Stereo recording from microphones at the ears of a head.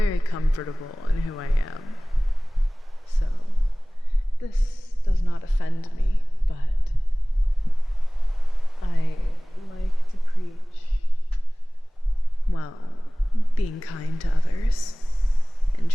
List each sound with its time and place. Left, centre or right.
0.0 s speech: left
3.1 s speech: left
8.8 s speech: left
10.2 s a sound: left
12.5 s speech: left